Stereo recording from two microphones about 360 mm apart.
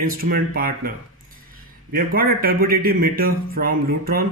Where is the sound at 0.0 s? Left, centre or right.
Right.